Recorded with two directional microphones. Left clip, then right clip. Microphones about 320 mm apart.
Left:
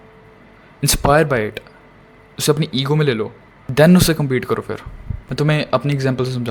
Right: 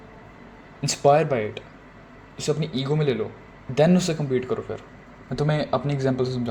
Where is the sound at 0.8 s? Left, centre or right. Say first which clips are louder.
Left 4 dB; left.